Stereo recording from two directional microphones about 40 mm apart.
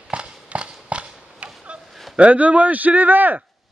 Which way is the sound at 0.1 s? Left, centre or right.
Right.